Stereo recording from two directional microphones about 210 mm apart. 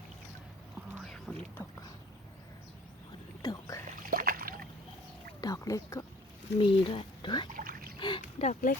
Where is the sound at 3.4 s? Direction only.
15° left (ahead or behind).